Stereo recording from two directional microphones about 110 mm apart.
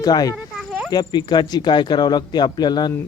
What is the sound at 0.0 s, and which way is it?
Speech, 35° left (ahead or behind).